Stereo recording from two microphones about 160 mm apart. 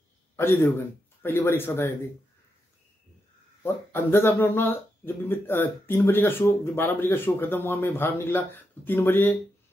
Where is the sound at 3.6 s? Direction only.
15° left (ahead or behind).